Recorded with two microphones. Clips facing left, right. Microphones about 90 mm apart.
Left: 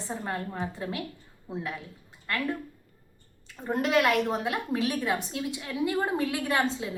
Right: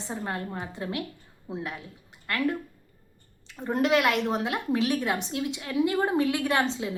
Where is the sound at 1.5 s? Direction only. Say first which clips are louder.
Right 1 dB; 20° right (ahead or behind).